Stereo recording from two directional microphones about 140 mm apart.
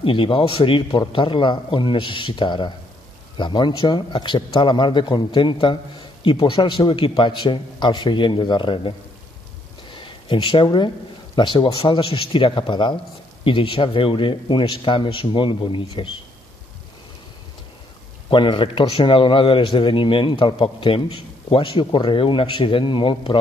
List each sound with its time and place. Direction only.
0.0 s a man's voice: 40° left (ahead or behind)
9.9 s a sound: 35° left (ahead or behind)
11.3 s a man's voice: 35° left (ahead or behind)
18.3 s a man's voice: 35° left (ahead or behind)